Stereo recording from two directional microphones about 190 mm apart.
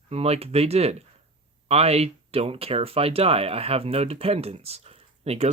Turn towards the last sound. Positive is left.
turn(degrees=-30)  # may be behind; listen again after turning